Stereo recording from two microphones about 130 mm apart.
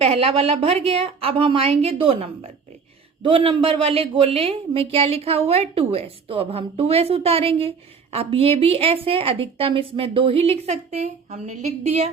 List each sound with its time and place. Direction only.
0.0 s a woman's voice: 45° right (ahead or behind)